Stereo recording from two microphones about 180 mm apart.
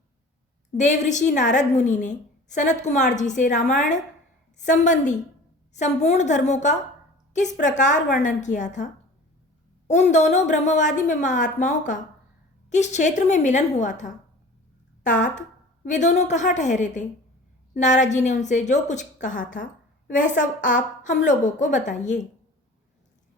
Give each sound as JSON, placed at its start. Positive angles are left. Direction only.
{"t": 0.8, "sound": "a woman's voice", "side_deg": 40}